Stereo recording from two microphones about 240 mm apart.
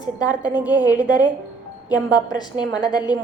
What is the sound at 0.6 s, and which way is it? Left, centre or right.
Speech, centre.